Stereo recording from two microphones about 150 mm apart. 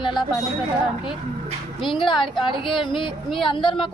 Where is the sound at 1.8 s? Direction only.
35° left (ahead or behind).